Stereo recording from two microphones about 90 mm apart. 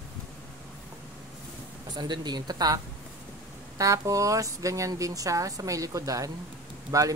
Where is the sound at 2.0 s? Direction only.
55° right (ahead or behind).